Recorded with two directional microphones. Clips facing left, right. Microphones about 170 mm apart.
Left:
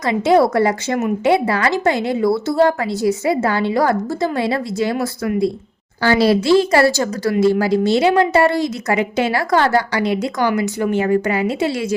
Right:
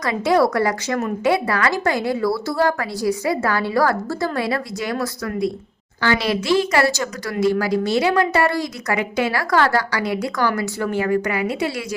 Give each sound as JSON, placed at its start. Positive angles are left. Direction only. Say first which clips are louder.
{"t": 0.0, "sound": "speech", "louder": "left 3 dB", "side_deg": 25}